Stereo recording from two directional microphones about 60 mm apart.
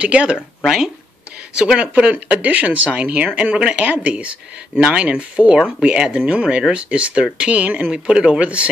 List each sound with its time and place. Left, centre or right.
0.0 s speech: centre
1.6 s speech: centre